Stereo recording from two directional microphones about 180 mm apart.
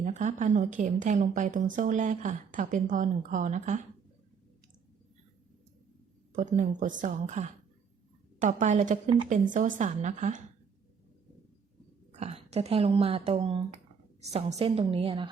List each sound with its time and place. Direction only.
0.0 s a woman's voice: 40° right (ahead or behind)
6.3 s a woman's voice: 45° right (ahead or behind)
12.1 s a woman's voice: 40° right (ahead or behind)